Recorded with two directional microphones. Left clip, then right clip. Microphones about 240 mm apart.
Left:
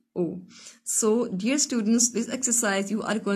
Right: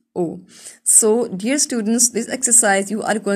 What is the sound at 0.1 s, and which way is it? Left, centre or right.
A woman's voice, right.